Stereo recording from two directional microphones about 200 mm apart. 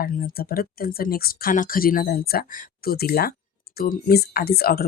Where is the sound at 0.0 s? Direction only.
50° left (ahead or behind).